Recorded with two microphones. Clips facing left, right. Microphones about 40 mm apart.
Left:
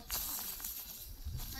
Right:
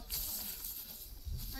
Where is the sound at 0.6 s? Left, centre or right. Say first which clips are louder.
Left 2 dB; left.